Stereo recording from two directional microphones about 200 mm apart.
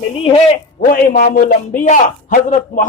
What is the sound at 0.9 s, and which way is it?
A man's voice, 45° left (ahead or behind).